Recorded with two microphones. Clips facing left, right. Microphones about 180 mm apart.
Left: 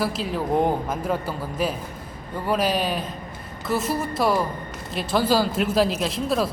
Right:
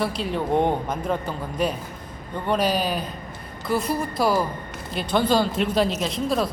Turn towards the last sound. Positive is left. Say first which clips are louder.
# even
turn(degrees=0)  # may be behind; listen again after turning